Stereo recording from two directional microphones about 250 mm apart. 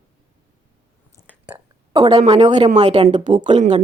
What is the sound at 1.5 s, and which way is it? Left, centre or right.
A woman's voice, centre.